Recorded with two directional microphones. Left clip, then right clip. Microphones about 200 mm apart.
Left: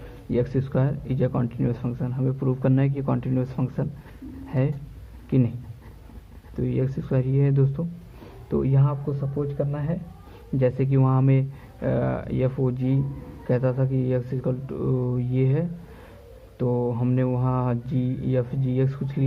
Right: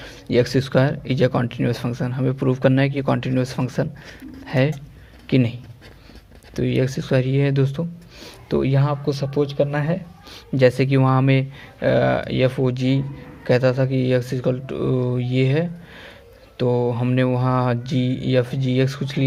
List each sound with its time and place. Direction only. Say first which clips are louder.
0.3 s speech: right 7 dB; 25° right (ahead or behind)
6.6 s speech: right 6 dB; 20° right (ahead or behind)